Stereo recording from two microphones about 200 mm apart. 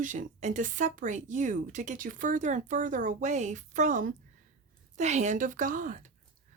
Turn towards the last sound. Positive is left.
turn(degrees=-40)  # may be behind; listen again after turning